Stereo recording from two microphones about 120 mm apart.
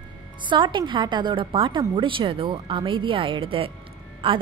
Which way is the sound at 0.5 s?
40° right (ahead or behind).